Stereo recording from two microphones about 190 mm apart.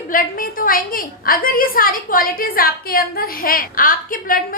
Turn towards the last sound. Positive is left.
turn(degrees=45)  # may be behind; listen again after turning